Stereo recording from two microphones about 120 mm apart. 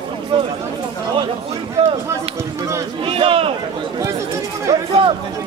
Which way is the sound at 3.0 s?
50° right (ahead or behind).